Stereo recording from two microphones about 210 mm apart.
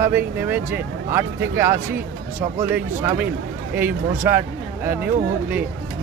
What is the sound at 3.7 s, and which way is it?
Speech, 10° right (ahead or behind).